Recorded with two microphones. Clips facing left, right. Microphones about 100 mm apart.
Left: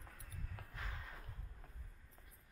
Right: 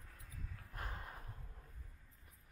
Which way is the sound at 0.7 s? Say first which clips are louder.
Right 3 dB; 45° right (ahead or behind).